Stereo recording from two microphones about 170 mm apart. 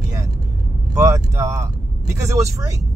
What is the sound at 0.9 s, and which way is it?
Speech, 20° right (ahead or behind).